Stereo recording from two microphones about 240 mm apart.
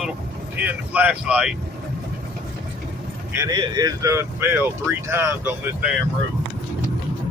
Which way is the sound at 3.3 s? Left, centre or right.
Centre.